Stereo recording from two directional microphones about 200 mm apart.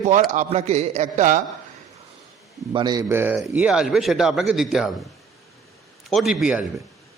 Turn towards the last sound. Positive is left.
turn(degrees=-5)  # may be behind; listen again after turning